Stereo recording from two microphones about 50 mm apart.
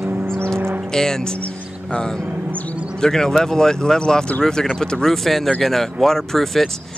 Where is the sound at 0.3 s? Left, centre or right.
Right.